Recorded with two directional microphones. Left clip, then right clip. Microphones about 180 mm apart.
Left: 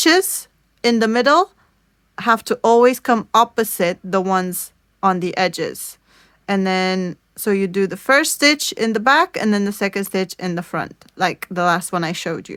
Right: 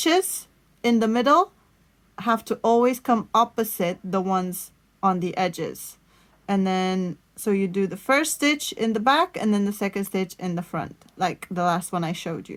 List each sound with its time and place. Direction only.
0.0 s a woman's voice: 25° left (ahead or behind)